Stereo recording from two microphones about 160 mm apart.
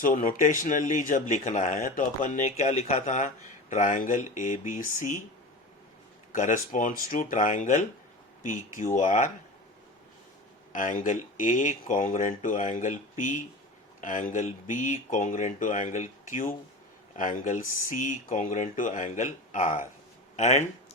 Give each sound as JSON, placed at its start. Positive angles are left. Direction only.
{"t": 0.0, "sound": "speech", "side_deg": 55}
{"t": 6.3, "sound": "speech", "side_deg": 55}
{"t": 9.0, "sound": "speech", "side_deg": 50}
{"t": 10.7, "sound": "speech", "side_deg": 55}
{"t": 20.3, "sound": "speech", "side_deg": 45}